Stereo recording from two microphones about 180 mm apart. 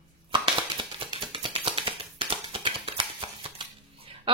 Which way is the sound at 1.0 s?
30° right (ahead or behind).